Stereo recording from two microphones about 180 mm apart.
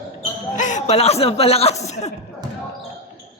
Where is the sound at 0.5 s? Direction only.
45° left (ahead or behind).